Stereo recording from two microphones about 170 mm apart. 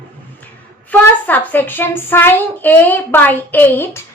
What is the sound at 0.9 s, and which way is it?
A woman's voice, 10° left (ahead or behind).